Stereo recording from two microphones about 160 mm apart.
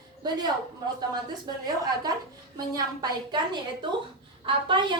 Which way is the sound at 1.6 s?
25° right (ahead or behind).